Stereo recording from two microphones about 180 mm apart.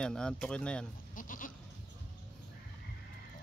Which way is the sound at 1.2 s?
50° left (ahead or behind).